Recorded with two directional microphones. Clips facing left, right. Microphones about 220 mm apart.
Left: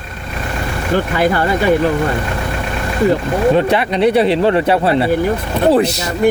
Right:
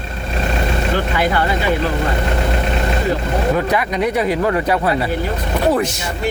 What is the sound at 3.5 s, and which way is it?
Speech, 30° left (ahead or behind).